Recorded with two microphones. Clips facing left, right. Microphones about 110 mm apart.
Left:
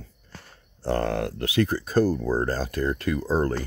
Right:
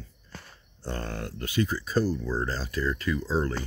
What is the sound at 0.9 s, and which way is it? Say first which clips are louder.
Speech: left 10 dB; 75° left (ahead or behind).